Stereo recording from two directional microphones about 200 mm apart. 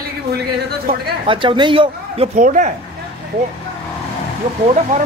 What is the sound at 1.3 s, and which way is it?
Speech, 25° right (ahead or behind).